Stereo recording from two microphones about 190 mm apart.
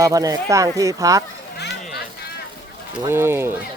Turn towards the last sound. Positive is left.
turn(degrees=-10)  # may be behind; listen again after turning